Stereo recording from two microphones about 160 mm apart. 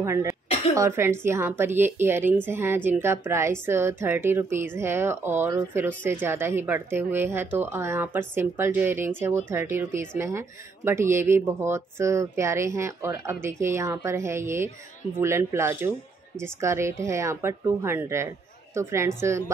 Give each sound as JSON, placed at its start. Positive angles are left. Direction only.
{"t": 0.0, "sound": "speech", "side_deg": -20}